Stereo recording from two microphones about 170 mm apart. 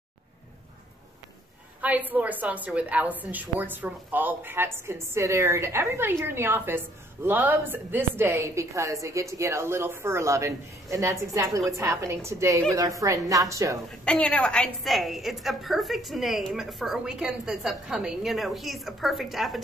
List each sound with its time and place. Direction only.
1.8 s a woman's voice: 10° right (ahead or behind)
13.8 s a woman's voice: 5° left (ahead or behind)